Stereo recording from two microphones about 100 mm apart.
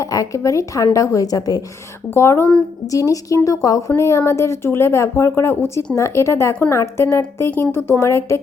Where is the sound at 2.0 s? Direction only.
25° left (ahead or behind).